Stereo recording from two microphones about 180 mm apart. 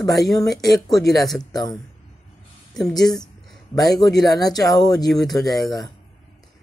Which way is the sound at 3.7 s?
20° left (ahead or behind).